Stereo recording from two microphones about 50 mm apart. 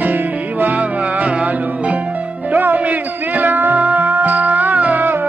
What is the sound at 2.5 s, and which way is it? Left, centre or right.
Music, right.